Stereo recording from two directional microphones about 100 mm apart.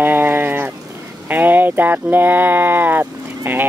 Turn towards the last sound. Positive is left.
turn(degrees=-20)  # may be behind; listen again after turning